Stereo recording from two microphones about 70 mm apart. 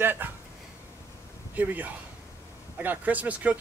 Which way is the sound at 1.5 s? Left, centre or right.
Right.